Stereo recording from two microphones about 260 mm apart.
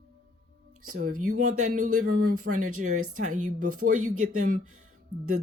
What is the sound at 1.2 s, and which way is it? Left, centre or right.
A woman's voice, right.